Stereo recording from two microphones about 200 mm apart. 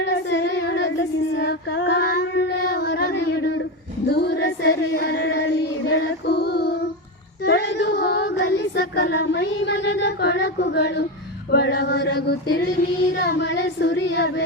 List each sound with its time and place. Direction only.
0.0 s female singing: 60° left (ahead or behind)